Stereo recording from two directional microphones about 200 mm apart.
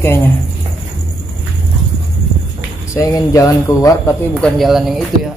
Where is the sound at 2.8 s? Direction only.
15° left (ahead or behind).